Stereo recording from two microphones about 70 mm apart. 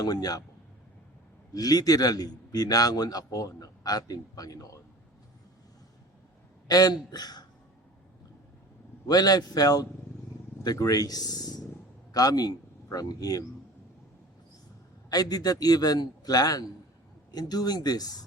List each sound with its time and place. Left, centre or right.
0.0 s a man's voice: left
1.5 s a man's voice: left
6.7 s a man's voice: left
9.0 s a man's voice: left
15.1 s a man's voice: left